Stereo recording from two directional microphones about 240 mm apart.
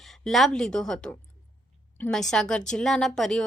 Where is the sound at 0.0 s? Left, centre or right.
Centre.